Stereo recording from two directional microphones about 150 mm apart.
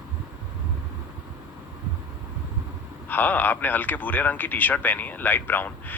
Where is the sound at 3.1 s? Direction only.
10° left (ahead or behind).